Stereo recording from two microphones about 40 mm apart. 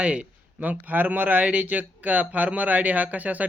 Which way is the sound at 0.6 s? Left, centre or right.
Right.